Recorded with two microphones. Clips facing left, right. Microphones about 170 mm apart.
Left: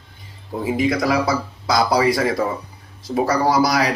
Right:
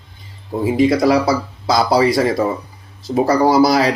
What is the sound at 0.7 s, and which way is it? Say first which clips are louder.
A man's voice: right 6 dB; 25° right (ahead or behind).